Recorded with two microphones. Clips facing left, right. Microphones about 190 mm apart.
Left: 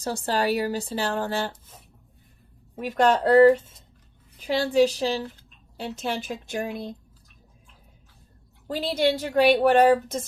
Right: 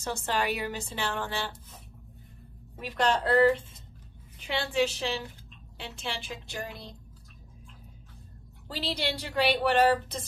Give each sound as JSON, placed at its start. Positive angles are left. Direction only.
{"t": 0.0, "sound": "a woman's voice", "side_deg": 35}
{"t": 2.7, "sound": "a woman's voice", "side_deg": 45}
{"t": 8.6, "sound": "a woman's voice", "side_deg": 50}